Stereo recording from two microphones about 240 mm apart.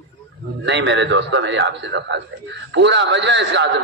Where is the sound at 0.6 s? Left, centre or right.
Right.